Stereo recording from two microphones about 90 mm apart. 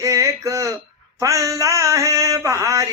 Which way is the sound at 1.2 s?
40° right (ahead or behind).